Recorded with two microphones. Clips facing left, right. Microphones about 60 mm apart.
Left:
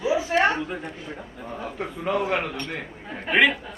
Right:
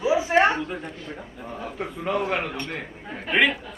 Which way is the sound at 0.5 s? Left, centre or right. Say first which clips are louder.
Even; centre.